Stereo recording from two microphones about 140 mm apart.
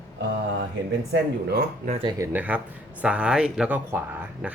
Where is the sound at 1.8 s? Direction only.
45° right (ahead or behind).